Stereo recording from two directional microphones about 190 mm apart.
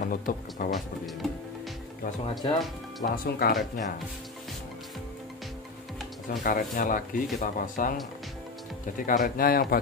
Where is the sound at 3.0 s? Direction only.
50° left (ahead or behind).